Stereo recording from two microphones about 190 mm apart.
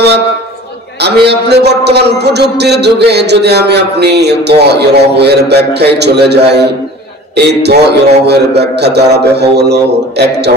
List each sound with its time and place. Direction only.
1.0 s a man's voice: 60° right (ahead or behind)